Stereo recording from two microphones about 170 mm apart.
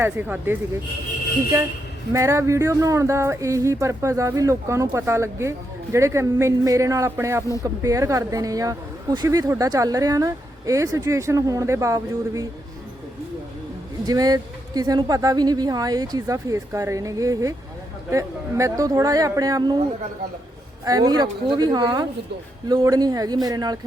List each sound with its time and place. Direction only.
0.0 s speech: 10° right (ahead or behind)
14.1 s speech: 20° right (ahead or behind)
20.8 s speech: 20° right (ahead or behind)